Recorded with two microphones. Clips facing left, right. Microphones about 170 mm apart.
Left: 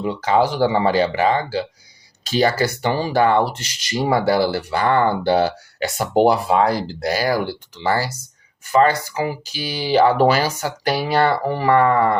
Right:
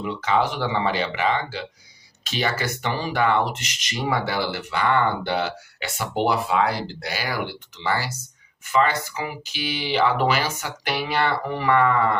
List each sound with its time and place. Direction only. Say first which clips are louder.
0.0 s speech: left 5 dB; 35° left (ahead or behind)